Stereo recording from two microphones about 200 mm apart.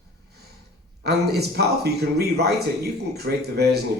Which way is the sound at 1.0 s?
55° right (ahead or behind).